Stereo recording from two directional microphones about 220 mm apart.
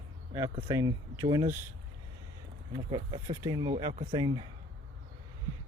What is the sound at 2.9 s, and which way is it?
Speech, 20° right (ahead or behind).